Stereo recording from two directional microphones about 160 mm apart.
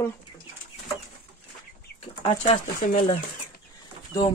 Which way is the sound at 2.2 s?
40° left (ahead or behind).